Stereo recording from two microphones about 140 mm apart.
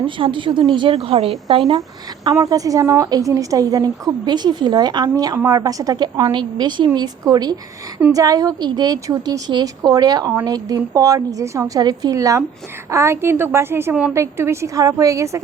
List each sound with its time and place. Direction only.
0.0 s a woman's voice: 35° right (ahead or behind)